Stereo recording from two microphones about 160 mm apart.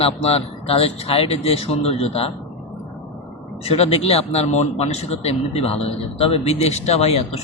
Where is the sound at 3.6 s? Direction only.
40° left (ahead or behind).